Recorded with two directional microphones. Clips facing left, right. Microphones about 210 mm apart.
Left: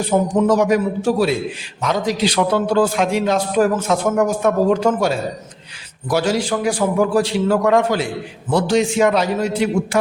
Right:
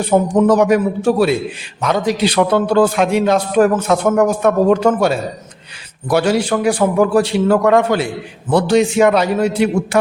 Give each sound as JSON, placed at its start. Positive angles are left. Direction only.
{"t": 0.1, "sound": "a man's voice", "side_deg": -60}